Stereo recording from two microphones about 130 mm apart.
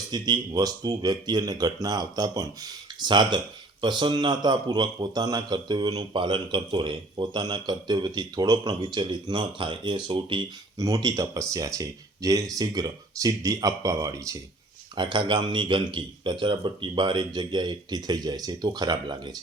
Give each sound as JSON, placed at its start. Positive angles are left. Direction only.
{"t": 0.1, "sound": "speech", "side_deg": -30}
{"t": 10.8, "sound": "speech", "side_deg": -25}
{"t": 14.9, "sound": "speech", "side_deg": -35}